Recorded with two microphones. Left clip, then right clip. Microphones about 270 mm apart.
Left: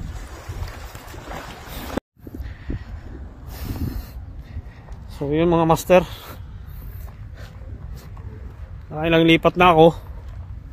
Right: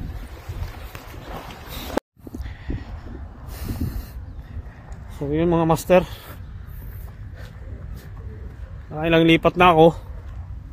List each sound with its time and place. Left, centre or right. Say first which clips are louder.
2.0 s a sound: right 3 dB; centre
3.5 s snort: even; centre
5.2 s speech: left 2 dB; centre
8.9 s speech: left 1 dB; centre